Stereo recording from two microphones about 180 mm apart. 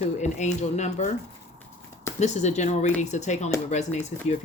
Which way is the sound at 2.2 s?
40° left (ahead or behind).